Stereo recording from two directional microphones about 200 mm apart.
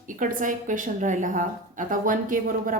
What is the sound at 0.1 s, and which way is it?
A woman's voice, 40° right (ahead or behind).